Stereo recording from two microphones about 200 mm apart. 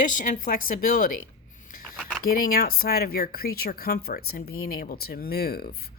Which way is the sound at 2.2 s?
45° left (ahead or behind).